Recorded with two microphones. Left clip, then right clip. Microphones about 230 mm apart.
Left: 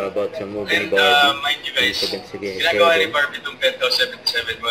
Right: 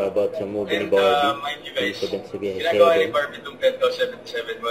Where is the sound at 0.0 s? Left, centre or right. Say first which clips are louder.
Right 1 dB; left.